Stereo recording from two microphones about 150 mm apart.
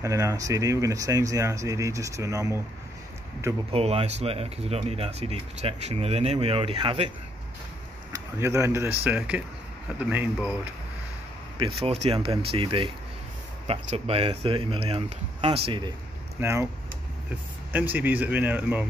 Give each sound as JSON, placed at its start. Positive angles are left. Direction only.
{"t": 0.0, "sound": "speech", "side_deg": -20}
{"t": 3.7, "sound": "speech", "side_deg": -45}
{"t": 8.1, "sound": "a man's voice", "side_deg": -20}
{"t": 11.5, "sound": "speech", "side_deg": -35}
{"t": 16.3, "sound": "speech", "side_deg": -15}
{"t": 17.7, "sound": "a man's voice", "side_deg": -10}